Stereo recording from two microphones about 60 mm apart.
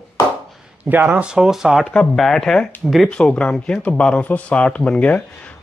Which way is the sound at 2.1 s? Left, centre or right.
Centre.